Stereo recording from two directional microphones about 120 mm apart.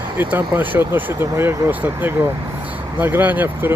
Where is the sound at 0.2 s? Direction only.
15° right (ahead or behind).